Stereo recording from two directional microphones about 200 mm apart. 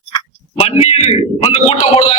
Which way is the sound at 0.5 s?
30° left (ahead or behind).